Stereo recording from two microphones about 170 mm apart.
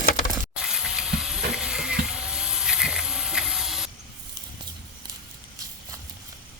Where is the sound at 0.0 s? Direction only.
55° left (ahead or behind).